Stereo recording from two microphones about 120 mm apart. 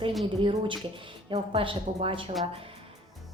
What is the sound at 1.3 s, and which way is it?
Speech, 60° right (ahead or behind).